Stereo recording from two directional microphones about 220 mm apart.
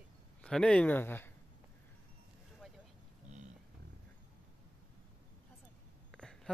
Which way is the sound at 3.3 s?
30° right (ahead or behind).